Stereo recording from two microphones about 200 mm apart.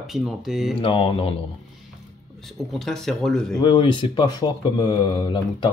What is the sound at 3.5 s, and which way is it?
Speech, 25° left (ahead or behind).